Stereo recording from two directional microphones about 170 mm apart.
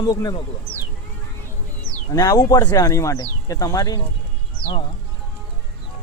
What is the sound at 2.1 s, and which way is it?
Speech, 20° left (ahead or behind).